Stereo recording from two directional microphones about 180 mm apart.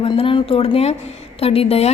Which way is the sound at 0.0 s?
30° left (ahead or behind).